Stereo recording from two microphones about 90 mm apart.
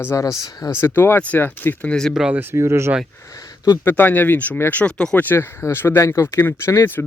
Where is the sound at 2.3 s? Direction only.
30° right (ahead or behind).